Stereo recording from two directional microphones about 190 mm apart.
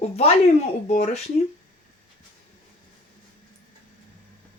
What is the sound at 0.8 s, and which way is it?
Speech, 35° left (ahead or behind).